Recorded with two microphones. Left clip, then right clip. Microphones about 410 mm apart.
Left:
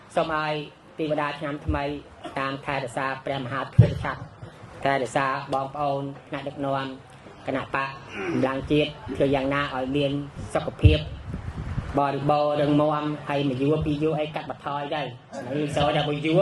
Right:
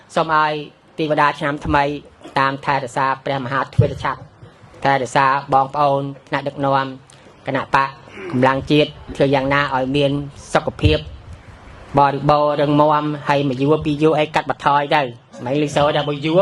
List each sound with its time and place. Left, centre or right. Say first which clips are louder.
0.1 s a woman's voice: right 9 dB; right
4.8 s a man's voice: right 8 dB; right
15.7 s speech: right 5 dB; right